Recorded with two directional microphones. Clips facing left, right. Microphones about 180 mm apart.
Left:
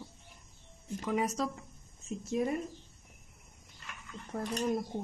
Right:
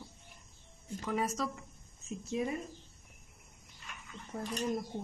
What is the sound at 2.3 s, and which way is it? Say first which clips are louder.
Speech: left 3 dB; 50° left (ahead or behind).